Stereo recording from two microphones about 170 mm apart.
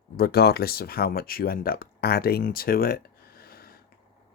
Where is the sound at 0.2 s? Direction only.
65° left (ahead or behind).